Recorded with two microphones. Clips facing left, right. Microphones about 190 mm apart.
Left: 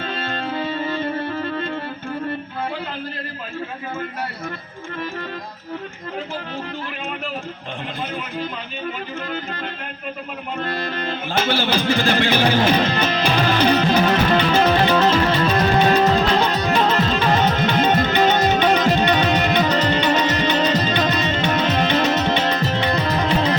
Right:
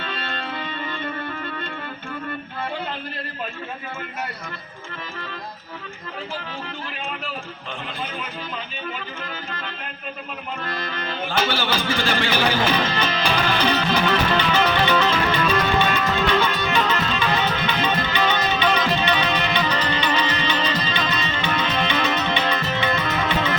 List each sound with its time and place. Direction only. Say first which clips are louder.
0.0 s music: left 4 dB; 40° left (ahead or behind)
10.8 s music: left 3 dB; 45° left (ahead or behind)